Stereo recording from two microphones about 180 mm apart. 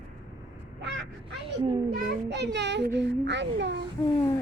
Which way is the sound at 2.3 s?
70° right (ahead or behind).